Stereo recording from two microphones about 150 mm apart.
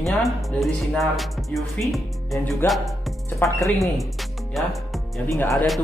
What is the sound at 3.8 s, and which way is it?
Music, centre (ahead or behind).